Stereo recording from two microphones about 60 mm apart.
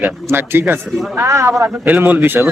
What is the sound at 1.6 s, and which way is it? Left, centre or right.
Speech, right.